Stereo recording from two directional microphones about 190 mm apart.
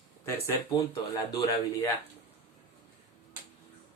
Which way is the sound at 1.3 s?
20° left (ahead or behind).